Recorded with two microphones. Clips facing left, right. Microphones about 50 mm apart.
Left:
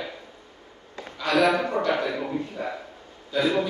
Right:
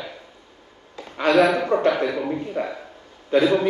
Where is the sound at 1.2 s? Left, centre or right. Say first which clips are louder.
Right 4 dB; right.